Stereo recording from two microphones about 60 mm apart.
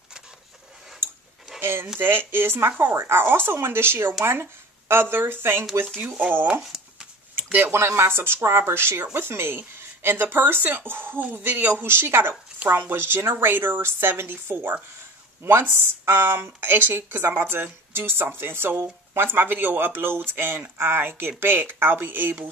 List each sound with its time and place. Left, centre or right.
1.6 s speech: right
6.6 s a sound: centre
7.5 s speech: right
13.5 s speech: right